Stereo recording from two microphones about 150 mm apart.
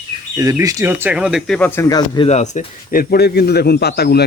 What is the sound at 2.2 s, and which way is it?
Speech, 50° left (ahead or behind).